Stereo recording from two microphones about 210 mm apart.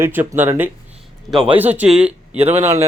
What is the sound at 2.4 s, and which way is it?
Speech, 30° right (ahead or behind).